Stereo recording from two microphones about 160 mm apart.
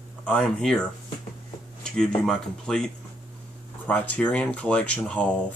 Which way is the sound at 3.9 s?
10° left (ahead or behind).